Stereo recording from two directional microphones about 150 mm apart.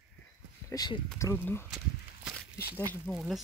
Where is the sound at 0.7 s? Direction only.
25° left (ahead or behind).